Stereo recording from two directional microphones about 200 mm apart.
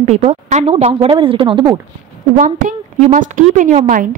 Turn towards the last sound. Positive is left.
turn(degrees=-40)  # may be behind; listen again after turning